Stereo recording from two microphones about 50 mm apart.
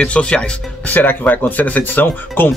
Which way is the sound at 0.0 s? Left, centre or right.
Left.